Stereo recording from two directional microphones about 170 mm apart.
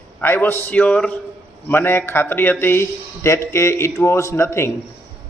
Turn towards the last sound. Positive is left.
turn(degrees=15)  # may be behind; listen again after turning